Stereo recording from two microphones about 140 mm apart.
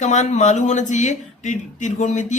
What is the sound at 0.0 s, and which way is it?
Speech, 60° left (ahead or behind).